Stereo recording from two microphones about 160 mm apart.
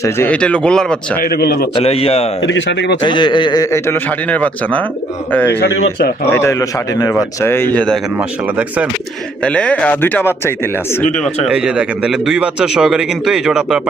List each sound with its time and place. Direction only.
0.0 s a man's voice: 15° left (ahead or behind)
0.3 s a man's voice: 5° left (ahead or behind)
1.2 s a man's voice: 75° left (ahead or behind)
1.7 s a man's voice: 40° left (ahead or behind)
2.6 s speech: 90° left
3.0 s a man's voice: 30° left (ahead or behind); by 5.5 s 10° left (ahead or behind)
5.5 s speech: 90° left
6.3 s a man's voice: 20° left (ahead or behind)
8.2 s speech: 10° right (ahead or behind)
9.4 s a man's voice: 10° left (ahead or behind)
11.4 s a man's voice: 5° right (ahead or behind)